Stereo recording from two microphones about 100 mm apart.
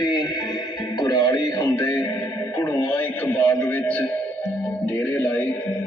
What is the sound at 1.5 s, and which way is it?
Music, 25° left (ahead or behind).